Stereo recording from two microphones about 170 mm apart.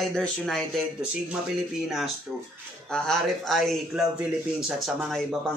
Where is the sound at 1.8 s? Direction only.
Centre (ahead or behind).